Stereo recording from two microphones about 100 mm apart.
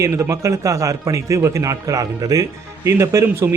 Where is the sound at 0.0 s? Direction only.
30° right (ahead or behind).